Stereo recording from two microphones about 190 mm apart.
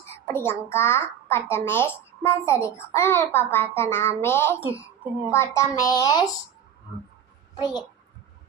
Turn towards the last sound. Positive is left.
turn(degrees=20)  # may be behind; listen again after turning